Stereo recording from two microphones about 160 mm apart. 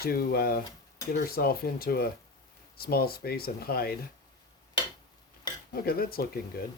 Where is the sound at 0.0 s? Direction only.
70° left (ahead or behind).